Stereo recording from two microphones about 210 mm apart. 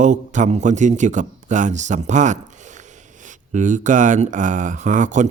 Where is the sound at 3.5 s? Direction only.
35° right (ahead or behind).